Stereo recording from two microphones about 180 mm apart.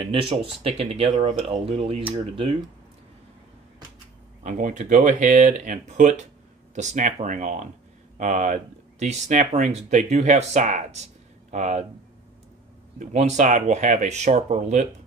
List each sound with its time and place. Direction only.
0.0 s speech: 30° right (ahead or behind)
4.4 s speech: 45° right (ahead or behind)
13.0 s speech: 40° right (ahead or behind)